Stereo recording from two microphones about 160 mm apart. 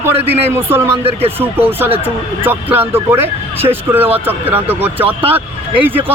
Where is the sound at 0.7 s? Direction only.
15° right (ahead or behind).